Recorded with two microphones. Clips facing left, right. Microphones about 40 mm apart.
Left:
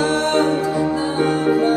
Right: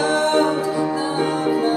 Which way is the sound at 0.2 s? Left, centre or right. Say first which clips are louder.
Even; left.